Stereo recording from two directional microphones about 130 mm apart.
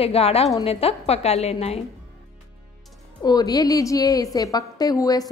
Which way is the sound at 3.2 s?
30° left (ahead or behind).